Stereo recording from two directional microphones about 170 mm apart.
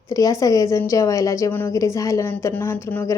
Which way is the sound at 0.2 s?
20° left (ahead or behind).